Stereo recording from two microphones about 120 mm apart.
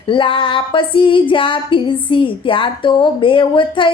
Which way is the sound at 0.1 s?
45° left (ahead or behind).